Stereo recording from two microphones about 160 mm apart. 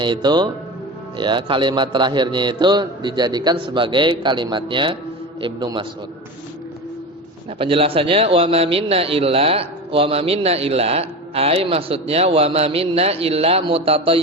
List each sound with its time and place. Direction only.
0.0 s a man's voice: 30° right (ahead or behind)
7.6 s a man's voice: 35° right (ahead or behind)